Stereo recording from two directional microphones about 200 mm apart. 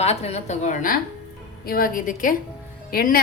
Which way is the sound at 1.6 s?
50° left (ahead or behind).